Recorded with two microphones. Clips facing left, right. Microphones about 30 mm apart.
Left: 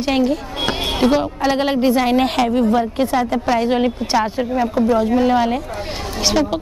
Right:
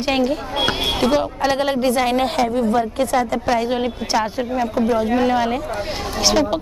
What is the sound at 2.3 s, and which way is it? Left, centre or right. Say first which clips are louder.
Speech: left 2 dB; left.